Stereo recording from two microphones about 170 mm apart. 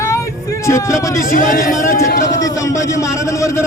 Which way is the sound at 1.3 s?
50° left (ahead or behind).